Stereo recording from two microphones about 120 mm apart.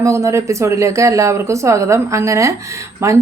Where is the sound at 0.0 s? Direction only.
25° right (ahead or behind).